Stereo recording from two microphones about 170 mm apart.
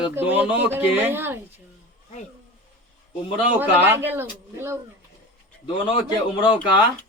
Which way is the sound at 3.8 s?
10° right (ahead or behind).